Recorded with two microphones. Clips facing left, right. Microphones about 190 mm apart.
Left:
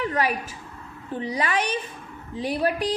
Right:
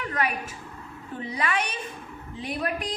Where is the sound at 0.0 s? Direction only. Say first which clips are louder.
Left 4 dB; 30° left (ahead or behind).